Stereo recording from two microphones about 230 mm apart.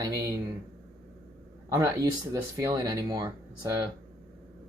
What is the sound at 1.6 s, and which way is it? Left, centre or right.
Speech, centre.